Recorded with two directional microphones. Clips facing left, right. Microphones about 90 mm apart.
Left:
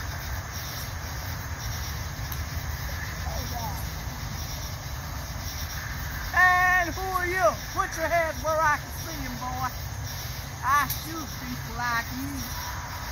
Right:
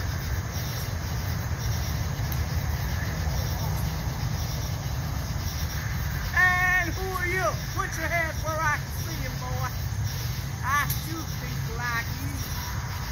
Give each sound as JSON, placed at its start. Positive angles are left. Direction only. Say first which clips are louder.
{"t": 6.3, "sound": "baby cry", "louder": "left 3 dB", "side_deg": 10}
{"t": 8.0, "sound": "speech", "louder": "left 6 dB", "side_deg": 20}
{"t": 10.6, "sound": "speech", "louder": "left 4 dB", "side_deg": 10}